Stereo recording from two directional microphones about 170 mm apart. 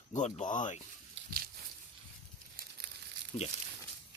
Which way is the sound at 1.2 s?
60° right (ahead or behind).